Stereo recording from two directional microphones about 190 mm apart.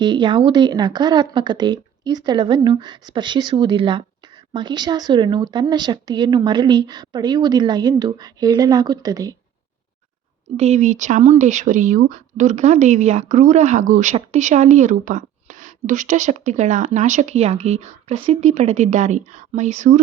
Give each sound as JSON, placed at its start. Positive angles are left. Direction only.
{"t": 0.0, "sound": "speech", "side_deg": -25}
{"t": 10.6, "sound": "speech", "side_deg": -35}